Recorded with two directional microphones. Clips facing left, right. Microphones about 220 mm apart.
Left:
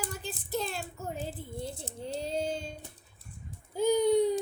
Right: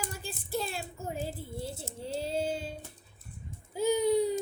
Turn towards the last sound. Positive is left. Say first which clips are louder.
# left 2 dB
turn(degrees=-5)  # may be behind; listen again after turning